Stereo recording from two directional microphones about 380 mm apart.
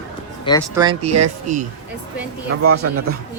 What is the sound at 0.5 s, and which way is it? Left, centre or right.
Music, centre.